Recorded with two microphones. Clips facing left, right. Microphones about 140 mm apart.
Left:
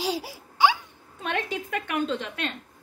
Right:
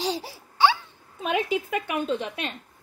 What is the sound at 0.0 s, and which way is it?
Baby laughter, 10° left (ahead or behind).